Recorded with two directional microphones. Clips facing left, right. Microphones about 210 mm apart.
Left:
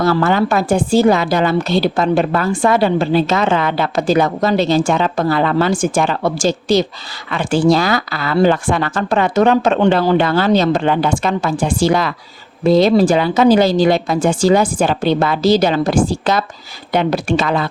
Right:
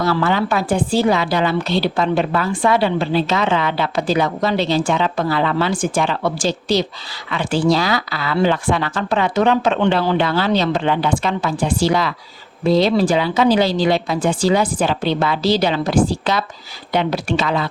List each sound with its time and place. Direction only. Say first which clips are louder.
0.0 s a woman's voice: left 4 dB; 45° left (ahead or behind)